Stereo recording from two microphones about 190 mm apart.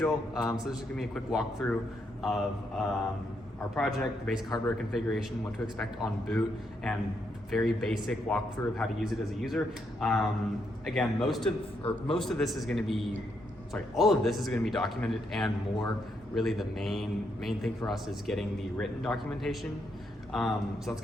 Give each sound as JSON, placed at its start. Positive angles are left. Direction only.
{"t": 0.0, "sound": "a man's voice", "side_deg": 0}
{"t": 4.4, "sound": "speech", "side_deg": 20}
{"t": 4.9, "sound": "a man's voice", "side_deg": 0}
{"t": 7.5, "sound": "a man's voice", "side_deg": 0}